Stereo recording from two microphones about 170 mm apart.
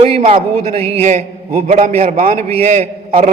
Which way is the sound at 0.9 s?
45° right (ahead or behind).